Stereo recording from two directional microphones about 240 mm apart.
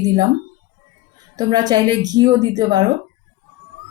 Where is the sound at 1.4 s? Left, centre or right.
Centre.